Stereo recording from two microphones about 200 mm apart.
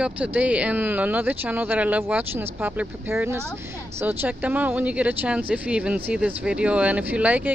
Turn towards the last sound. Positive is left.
turn(degrees=-5)  # may be behind; listen again after turning